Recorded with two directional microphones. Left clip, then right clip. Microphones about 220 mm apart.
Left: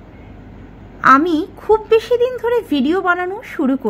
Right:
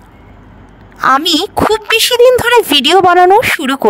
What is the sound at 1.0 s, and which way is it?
Speech, 50° right (ahead or behind).